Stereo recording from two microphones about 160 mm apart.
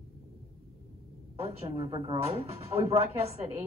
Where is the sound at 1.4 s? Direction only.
40° right (ahead or behind).